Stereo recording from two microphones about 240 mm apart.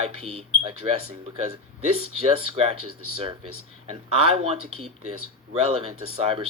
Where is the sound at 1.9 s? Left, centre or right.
Right.